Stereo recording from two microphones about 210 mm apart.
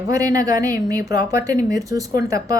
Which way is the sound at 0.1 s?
15° right (ahead or behind).